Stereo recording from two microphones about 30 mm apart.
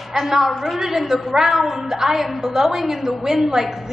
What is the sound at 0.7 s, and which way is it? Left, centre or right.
A woman's voice, centre.